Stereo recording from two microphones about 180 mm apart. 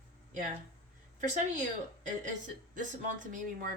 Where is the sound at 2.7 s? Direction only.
45° right (ahead or behind).